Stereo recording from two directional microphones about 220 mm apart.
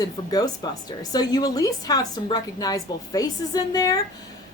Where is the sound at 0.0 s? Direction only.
15° left (ahead or behind).